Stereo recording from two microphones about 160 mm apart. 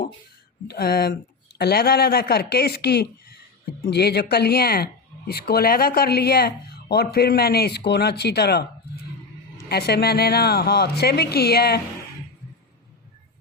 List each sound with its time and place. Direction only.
0.7 s speech: 75° left (ahead or behind); by 8.6 s 90° left
9.6 s speech: 80° left